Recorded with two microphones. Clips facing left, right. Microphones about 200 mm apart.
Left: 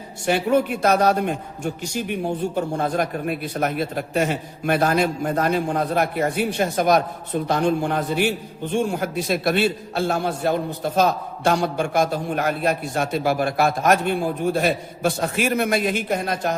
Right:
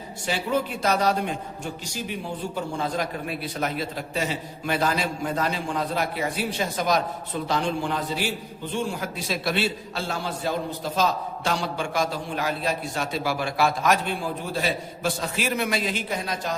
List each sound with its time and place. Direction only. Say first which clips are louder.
0.3 s a man's voice: left 7 dB; 55° left (ahead or behind)